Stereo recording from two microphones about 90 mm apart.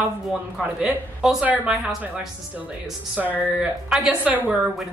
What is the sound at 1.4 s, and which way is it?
Speech, 20° right (ahead or behind).